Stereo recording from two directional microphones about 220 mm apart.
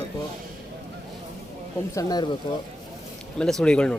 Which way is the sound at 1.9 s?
15° left (ahead or behind).